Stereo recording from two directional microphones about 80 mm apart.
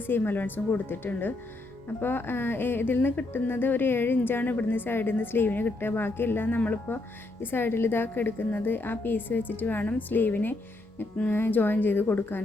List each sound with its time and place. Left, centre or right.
0.1 s speech: left